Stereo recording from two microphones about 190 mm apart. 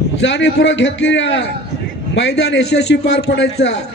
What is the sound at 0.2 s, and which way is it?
A man's voice, 70° left (ahead or behind).